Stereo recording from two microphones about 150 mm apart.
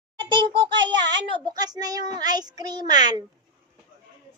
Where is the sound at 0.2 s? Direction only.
30° right (ahead or behind).